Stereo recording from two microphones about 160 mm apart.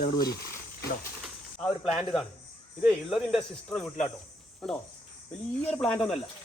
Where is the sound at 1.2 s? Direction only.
5° right (ahead or behind).